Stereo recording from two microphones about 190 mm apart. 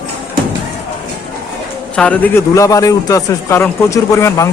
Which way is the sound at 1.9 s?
5° left (ahead or behind).